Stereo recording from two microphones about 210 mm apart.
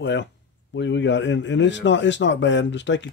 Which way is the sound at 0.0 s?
55° left (ahead or behind).